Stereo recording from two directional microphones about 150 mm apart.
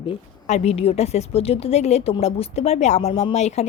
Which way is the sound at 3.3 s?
50° left (ahead or behind).